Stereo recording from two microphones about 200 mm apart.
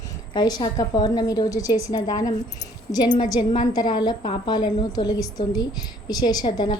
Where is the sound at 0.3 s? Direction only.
20° left (ahead or behind).